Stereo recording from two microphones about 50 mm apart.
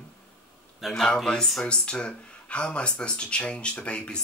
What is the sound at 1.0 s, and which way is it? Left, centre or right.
Speech, centre.